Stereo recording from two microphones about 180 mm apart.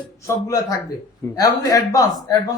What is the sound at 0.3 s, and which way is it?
A man's voice, 15° left (ahead or behind).